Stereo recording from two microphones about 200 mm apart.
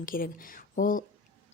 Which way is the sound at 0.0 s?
45° left (ahead or behind).